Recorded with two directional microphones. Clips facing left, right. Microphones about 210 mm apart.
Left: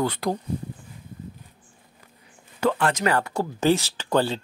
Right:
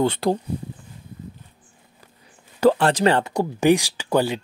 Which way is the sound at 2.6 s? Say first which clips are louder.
Right 6 dB; 35° right (ahead or behind).